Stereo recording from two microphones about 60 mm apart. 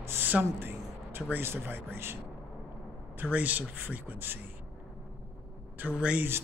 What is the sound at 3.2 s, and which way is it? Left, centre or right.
Speech, right.